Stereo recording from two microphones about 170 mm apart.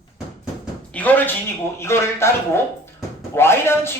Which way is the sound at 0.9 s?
10° left (ahead or behind).